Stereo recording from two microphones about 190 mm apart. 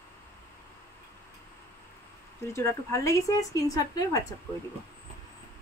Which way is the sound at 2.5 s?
15° left (ahead or behind).